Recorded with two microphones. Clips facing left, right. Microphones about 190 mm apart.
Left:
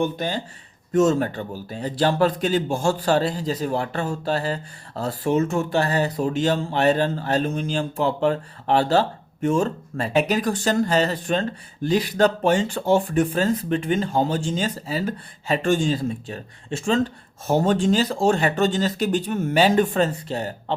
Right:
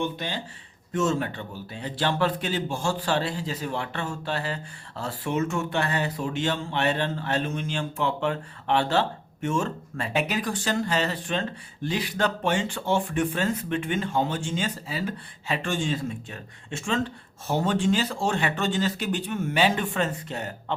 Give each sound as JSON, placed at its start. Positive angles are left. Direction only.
{"t": 0.0, "sound": "speech", "side_deg": 45}